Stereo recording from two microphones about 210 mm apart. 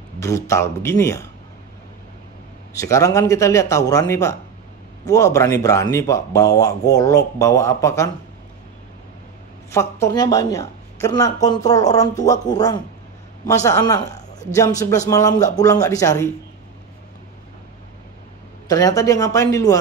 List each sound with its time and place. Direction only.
0.2 s speech: 15° left (ahead or behind)
2.8 s speech: 15° left (ahead or behind)
9.7 s speech: 15° left (ahead or behind)
15.0 s speech: 15° left (ahead or behind)
18.7 s speech: 15° left (ahead or behind)